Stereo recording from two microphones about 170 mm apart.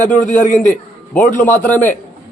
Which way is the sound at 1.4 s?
10° left (ahead or behind).